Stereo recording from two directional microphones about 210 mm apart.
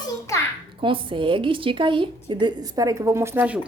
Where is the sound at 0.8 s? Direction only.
25° right (ahead or behind); by 3.6 s 10° right (ahead or behind).